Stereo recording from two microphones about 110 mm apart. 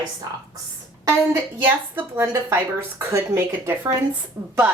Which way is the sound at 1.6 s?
20° right (ahead or behind).